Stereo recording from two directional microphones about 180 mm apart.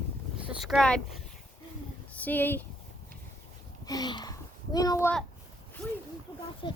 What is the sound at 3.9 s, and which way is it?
Speech, 25° left (ahead or behind).